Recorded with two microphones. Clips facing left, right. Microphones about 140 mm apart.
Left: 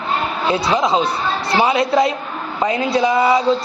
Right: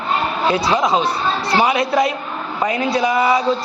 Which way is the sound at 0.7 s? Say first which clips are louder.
Even; 25° left (ahead or behind).